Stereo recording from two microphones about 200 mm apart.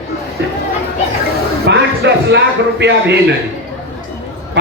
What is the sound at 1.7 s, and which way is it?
Speech, 55° right (ahead or behind).